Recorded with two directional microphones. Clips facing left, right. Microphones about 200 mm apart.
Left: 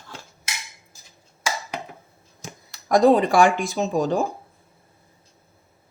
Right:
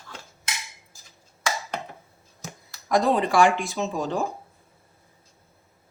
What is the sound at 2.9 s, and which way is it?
Speech, 40° left (ahead or behind).